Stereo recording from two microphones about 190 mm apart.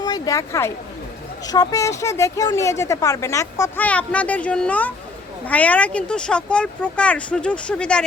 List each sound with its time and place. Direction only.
0.0 s a woman's voice: 20° left (ahead or behind)